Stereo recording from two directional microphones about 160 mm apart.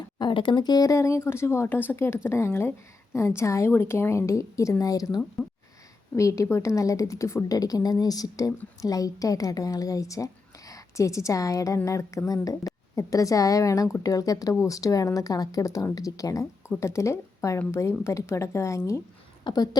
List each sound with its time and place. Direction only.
0.2 s a woman's voice: 30° left (ahead or behind)
19.5 s a woman's voice: 30° left (ahead or behind)